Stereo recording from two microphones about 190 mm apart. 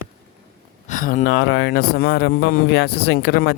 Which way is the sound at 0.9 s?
40° left (ahead or behind).